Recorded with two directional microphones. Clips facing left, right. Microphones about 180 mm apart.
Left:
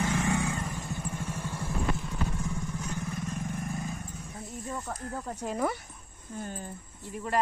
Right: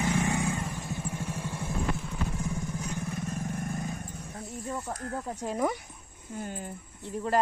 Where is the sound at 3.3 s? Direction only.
50° right (ahead or behind).